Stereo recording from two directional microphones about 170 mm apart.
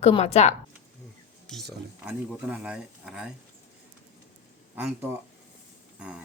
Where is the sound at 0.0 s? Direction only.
40° left (ahead or behind).